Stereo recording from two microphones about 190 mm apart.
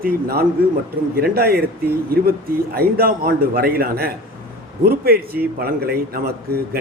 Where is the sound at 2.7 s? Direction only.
50° right (ahead or behind).